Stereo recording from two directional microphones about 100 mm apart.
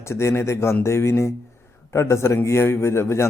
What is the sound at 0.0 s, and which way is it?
A man's voice, 25° left (ahead or behind).